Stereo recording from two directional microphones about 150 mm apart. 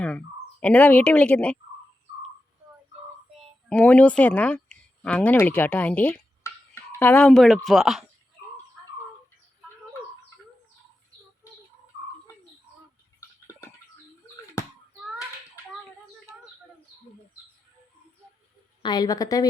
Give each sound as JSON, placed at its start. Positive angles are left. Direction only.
{"t": 0.6, "sound": "speech", "side_deg": 10}
{"t": 3.7, "sound": "speech", "side_deg": 10}
{"t": 13.1, "sound": "a sound", "side_deg": 20}
{"t": 18.8, "sound": "a woman's voice", "side_deg": 30}